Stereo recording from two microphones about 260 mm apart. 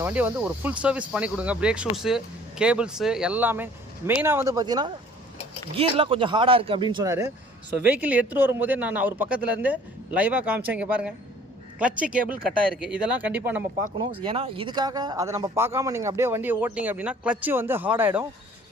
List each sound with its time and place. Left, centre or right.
0.0 s speech: centre